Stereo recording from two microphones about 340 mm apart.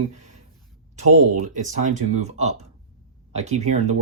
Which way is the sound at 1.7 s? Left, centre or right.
Right.